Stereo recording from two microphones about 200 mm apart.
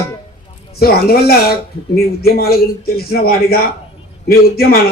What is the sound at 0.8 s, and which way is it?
Speech, 50° left (ahead or behind).